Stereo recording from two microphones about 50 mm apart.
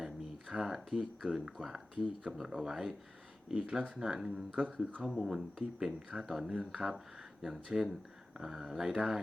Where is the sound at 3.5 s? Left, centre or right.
Right.